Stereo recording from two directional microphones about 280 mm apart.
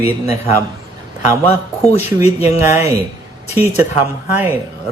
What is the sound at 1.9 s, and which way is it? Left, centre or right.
Speech, left.